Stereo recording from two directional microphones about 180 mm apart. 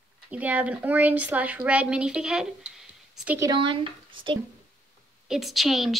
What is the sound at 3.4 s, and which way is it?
Speech, 25° right (ahead or behind).